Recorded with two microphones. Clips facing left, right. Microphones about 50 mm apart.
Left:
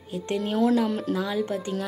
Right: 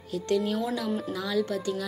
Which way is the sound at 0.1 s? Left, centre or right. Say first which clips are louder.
Right 1 dB; left.